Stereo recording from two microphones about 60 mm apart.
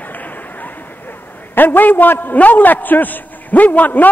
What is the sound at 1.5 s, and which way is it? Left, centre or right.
A man's voice, left.